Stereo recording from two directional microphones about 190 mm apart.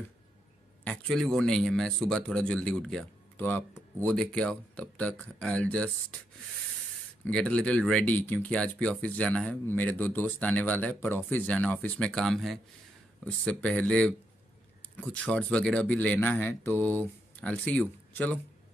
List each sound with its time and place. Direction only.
0.8 s a man's voice: centre (ahead or behind)
7.2 s speech: 5° left (ahead or behind)